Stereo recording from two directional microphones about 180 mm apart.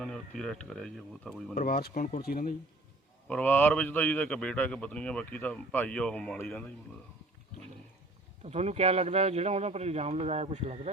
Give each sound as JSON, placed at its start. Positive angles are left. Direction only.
{"t": 0.0, "sound": "speech", "side_deg": 5}
{"t": 1.5, "sound": "speech", "side_deg": 55}
{"t": 3.2, "sound": "a man's voice", "side_deg": 10}
{"t": 8.4, "sound": "speech", "side_deg": -35}